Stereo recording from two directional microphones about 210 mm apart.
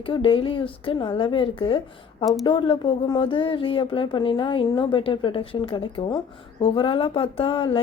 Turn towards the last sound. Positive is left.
turn(degrees=25)  # may be behind; listen again after turning